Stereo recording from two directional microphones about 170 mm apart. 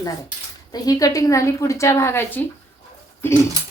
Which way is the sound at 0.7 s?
20° left (ahead or behind).